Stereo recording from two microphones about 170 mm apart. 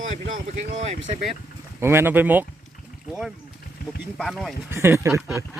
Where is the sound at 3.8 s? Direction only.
55° left (ahead or behind).